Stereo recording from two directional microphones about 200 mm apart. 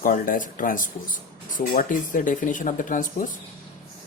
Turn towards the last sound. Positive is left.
turn(degrees=40)  # may be behind; listen again after turning